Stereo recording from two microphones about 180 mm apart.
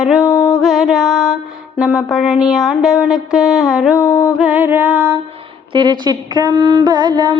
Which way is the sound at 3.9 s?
15° left (ahead or behind).